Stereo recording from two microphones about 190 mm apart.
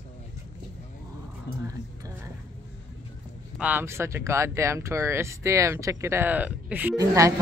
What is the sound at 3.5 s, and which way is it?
Speech, 10° right (ahead or behind).